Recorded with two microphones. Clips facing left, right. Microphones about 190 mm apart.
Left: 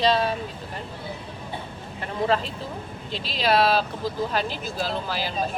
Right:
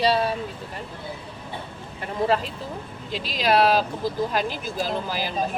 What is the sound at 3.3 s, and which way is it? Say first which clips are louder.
Speech: right 1 dB; 10° right (ahead or behind).